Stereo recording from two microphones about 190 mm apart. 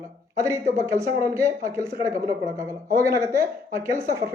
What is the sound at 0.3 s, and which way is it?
Speech, 15° right (ahead or behind).